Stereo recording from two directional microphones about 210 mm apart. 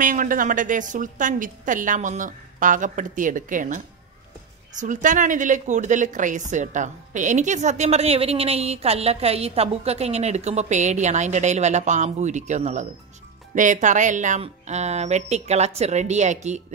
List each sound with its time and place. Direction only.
0.0 s speech: 40° right (ahead or behind)